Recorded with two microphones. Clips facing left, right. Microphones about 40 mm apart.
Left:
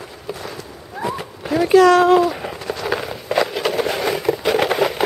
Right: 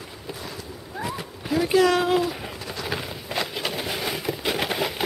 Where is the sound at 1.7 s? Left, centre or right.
Centre.